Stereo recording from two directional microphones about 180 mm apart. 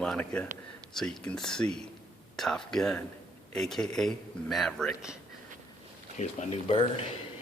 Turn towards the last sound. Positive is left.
turn(degrees=30)  # may be behind; listen again after turning